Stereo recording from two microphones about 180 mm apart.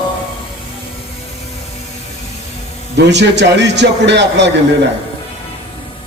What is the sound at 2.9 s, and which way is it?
A man's voice, 75° right (ahead or behind).